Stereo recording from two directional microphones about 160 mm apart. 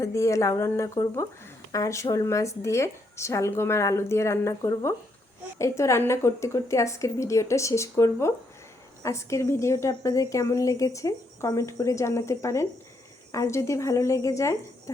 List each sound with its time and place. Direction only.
0.0 s a woman's voice: 20° left (ahead or behind)